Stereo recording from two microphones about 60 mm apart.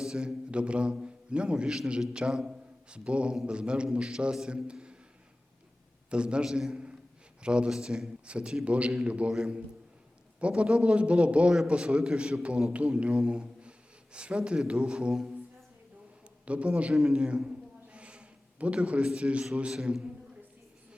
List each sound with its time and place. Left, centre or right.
0.0 s a man's voice: centre
6.1 s a man's voice: centre
16.5 s speech: right
16.9 s a sound: centre
19.7 s a man's voice: centre